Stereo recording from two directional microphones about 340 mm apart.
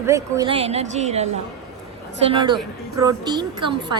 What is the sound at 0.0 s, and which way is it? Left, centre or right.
A woman's voice, centre.